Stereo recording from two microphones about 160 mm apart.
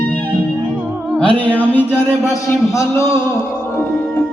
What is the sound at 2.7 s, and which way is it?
Speech, 20° left (ahead or behind).